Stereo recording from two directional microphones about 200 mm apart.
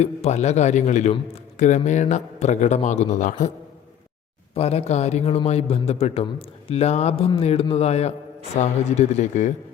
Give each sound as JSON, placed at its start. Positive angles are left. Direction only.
{"t": 0.0, "sound": "a man's voice", "side_deg": 35}
{"t": 4.5, "sound": "a man's voice", "side_deg": 30}